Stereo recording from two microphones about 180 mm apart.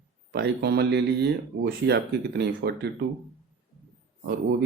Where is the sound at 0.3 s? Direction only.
70° right (ahead or behind).